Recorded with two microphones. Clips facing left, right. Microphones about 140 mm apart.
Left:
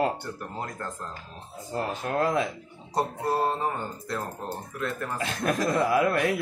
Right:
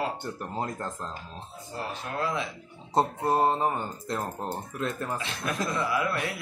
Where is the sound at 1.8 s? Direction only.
45° left (ahead or behind).